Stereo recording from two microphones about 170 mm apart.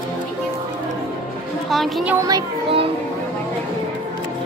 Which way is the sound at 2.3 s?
35° right (ahead or behind).